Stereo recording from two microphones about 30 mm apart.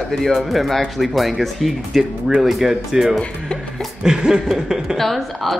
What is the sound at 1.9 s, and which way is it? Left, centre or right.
Speech, right.